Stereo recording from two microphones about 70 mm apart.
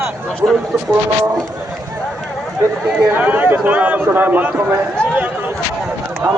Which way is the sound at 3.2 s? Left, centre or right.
Right.